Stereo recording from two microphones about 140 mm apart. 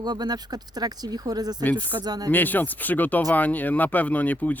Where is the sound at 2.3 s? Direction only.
15° left (ahead or behind).